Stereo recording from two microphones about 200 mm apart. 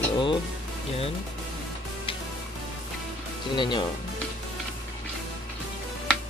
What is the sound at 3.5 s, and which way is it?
Speech, 25° left (ahead or behind).